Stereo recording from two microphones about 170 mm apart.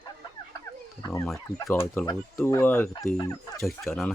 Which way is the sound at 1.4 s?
15° left (ahead or behind).